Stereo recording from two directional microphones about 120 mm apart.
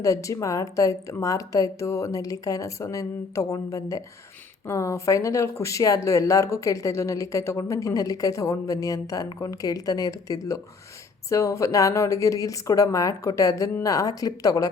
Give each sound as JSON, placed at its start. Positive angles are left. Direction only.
{"t": 0.0, "sound": "speech", "side_deg": 25}